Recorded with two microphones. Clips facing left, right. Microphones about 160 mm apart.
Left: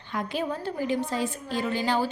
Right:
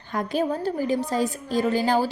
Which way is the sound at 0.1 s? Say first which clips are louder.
Right 5 dB; 45° right (ahead or behind).